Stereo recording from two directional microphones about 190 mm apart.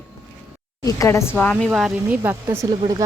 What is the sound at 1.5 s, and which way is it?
Speech, centre (ahead or behind).